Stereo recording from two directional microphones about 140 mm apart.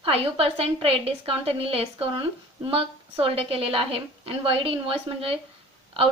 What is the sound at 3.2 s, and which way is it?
A woman's voice, 40° right (ahead or behind).